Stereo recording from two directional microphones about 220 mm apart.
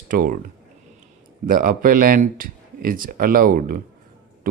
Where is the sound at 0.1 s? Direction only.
40° right (ahead or behind).